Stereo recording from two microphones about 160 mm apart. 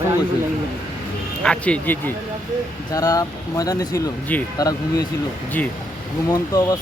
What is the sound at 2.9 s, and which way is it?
Speech, 20° left (ahead or behind).